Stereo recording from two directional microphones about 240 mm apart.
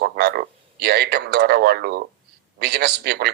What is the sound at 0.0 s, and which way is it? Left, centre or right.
Frog, right.